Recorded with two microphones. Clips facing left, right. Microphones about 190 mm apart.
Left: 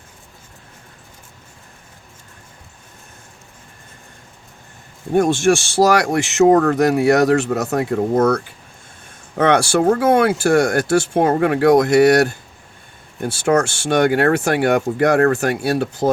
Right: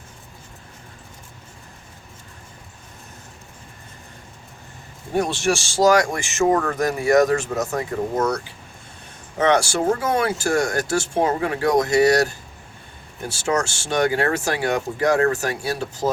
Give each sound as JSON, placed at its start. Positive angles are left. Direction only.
{"t": 5.1, "sound": "speech", "side_deg": 50}